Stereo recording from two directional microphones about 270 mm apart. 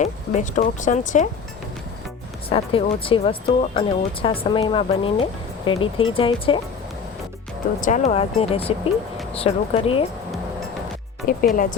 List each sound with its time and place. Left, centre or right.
0.0 s speech: left
2.5 s speech: left
5.7 s speech: left
6.1 s speech: centre
7.8 s speech: left
11.3 s speech: left